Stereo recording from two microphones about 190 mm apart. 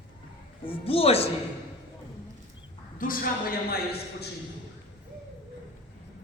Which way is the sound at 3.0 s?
50° left (ahead or behind).